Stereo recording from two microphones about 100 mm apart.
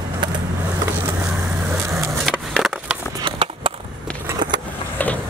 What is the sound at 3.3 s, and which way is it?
Skateboard, 60° right (ahead or behind).